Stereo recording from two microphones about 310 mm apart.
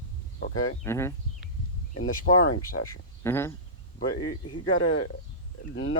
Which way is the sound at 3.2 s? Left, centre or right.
Centre.